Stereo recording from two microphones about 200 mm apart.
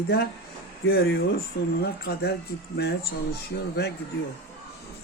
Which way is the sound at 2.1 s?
55° left (ahead or behind).